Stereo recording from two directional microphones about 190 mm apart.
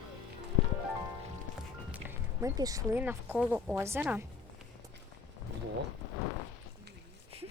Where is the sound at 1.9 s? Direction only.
15° right (ahead or behind).